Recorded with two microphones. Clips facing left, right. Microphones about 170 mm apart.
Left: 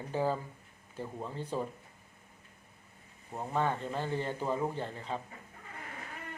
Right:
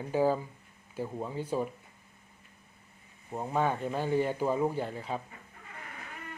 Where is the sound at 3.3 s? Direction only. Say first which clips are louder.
Right 3 dB; 10° right (ahead or behind).